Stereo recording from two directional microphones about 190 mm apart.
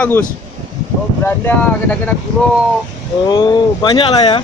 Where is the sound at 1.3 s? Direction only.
10° left (ahead or behind).